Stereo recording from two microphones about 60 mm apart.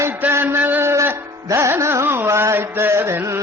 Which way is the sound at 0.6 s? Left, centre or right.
Right.